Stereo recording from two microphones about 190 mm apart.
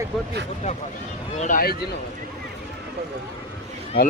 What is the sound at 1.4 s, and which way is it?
Speech, 45° left (ahead or behind).